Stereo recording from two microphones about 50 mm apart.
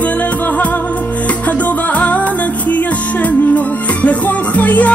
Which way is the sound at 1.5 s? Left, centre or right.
Left.